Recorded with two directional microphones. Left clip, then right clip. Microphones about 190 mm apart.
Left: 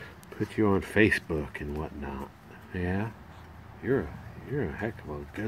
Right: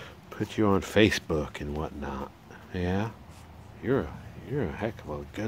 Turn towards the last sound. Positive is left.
turn(degrees=-15)  # may be behind; listen again after turning